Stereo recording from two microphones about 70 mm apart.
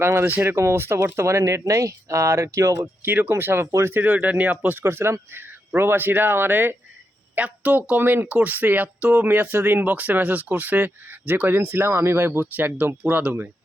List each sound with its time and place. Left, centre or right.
0.0 s speech: right
2.8 s speech: right
3.9 s speech: right